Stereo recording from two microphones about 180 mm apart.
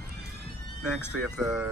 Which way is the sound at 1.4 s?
5° right (ahead or behind).